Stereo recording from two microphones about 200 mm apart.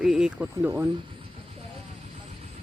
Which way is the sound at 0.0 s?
5° right (ahead or behind).